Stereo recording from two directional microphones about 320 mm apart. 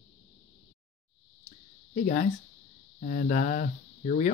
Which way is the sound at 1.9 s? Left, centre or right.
Left.